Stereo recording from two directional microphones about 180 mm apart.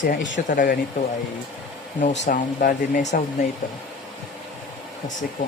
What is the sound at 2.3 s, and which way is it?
Speech, 50° left (ahead or behind).